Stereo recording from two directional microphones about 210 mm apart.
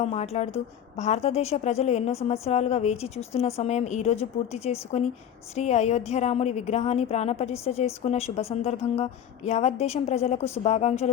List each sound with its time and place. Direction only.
0.0 s a woman's voice: 30° left (ahead or behind)